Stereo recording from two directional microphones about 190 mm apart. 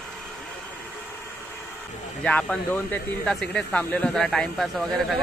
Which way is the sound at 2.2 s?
5° left (ahead or behind).